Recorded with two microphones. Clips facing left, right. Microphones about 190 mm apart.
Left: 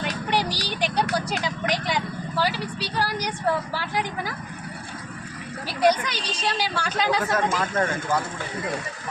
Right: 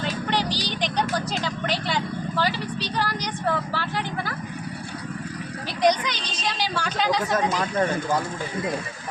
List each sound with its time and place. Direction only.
0.0 s music: 10° left (ahead or behind)
1.1 s vehicle: 10° left (ahead or behind)
5.8 s a woman's voice: 5° left (ahead or behind)
7.3 s speech: 15° right (ahead or behind)